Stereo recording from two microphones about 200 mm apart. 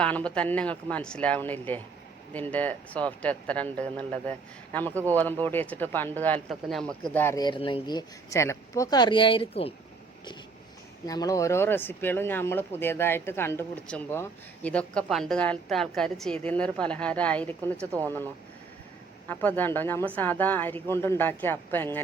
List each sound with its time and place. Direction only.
0.0 s speech: 5° left (ahead or behind); by 9.7 s 30° left (ahead or behind)
11.0 s speech: 20° left (ahead or behind)
19.3 s speech: 10° left (ahead or behind)